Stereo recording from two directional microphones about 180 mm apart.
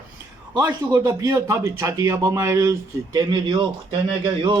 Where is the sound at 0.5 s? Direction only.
20° right (ahead or behind).